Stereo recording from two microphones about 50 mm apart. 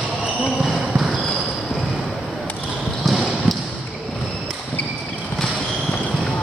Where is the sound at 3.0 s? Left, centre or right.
Centre.